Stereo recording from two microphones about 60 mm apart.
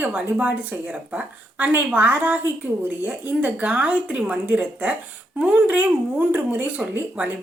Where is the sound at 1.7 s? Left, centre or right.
Right.